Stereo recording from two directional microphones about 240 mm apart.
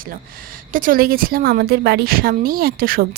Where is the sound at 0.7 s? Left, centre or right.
Right.